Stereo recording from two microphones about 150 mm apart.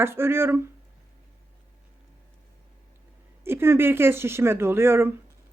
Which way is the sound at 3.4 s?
15° right (ahead or behind).